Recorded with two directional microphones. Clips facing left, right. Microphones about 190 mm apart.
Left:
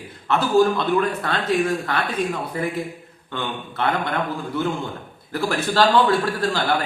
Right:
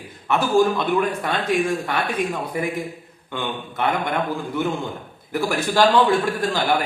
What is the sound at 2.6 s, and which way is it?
A man's voice, 15° right (ahead or behind).